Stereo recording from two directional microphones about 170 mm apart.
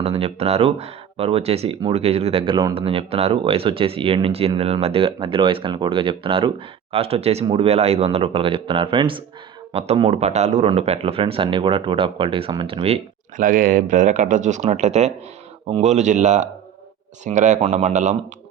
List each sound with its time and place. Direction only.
0.0 s speech: 35° right (ahead or behind)
13.3 s speech: 50° right (ahead or behind)